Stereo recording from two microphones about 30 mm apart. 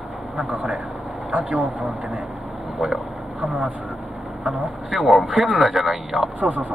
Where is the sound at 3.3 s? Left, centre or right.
Right.